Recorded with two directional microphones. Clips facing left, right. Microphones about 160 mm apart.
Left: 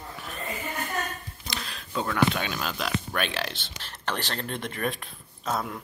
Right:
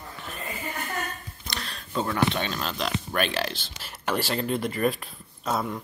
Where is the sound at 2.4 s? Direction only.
5° left (ahead or behind).